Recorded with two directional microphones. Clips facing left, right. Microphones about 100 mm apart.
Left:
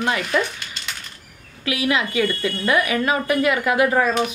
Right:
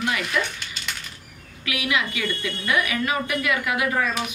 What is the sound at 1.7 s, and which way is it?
Speech, 30° left (ahead or behind).